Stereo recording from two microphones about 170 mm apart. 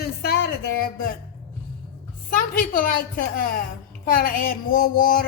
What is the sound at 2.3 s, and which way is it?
Speech, 55° left (ahead or behind).